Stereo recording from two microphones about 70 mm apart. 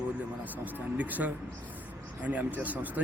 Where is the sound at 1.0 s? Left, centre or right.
Right.